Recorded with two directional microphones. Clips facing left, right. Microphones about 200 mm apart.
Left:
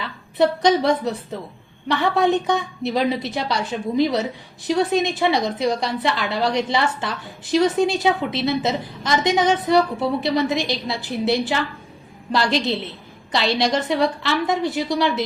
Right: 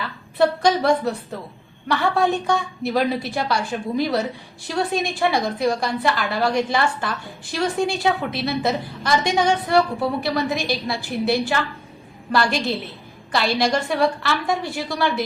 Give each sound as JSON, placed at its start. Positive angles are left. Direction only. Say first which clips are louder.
{"t": 0.3, "sound": "a woman's voice", "louder": "left 1 dB", "side_deg": 20}